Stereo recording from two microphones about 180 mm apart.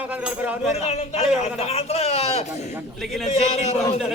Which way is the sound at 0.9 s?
35° left (ahead or behind).